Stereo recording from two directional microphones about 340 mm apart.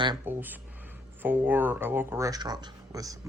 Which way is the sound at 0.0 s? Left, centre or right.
Centre.